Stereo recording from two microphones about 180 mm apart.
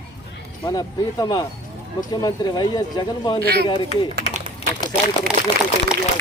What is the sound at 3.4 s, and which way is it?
Speech, 60° right (ahead or behind).